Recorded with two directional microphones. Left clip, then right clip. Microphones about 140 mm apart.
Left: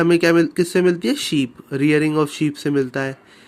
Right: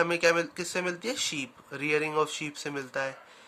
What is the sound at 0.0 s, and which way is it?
Speech, 30° left (ahead or behind).